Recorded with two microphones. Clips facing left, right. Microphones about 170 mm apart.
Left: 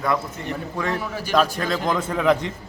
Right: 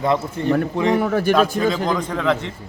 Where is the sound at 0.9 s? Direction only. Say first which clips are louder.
Right 8 dB; 55° right (ahead or behind).